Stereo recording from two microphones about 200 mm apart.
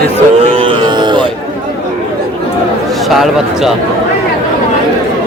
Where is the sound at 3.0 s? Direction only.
Centre (ahead or behind).